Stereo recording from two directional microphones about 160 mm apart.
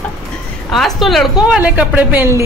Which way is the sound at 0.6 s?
Centre (ahead or behind).